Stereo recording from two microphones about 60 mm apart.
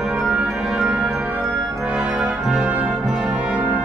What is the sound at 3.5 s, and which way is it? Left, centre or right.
Music, right.